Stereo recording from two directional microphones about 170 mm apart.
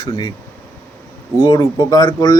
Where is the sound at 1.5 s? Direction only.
20° left (ahead or behind).